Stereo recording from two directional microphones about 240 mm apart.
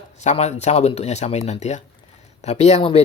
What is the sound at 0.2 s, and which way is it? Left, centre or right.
Speech, left.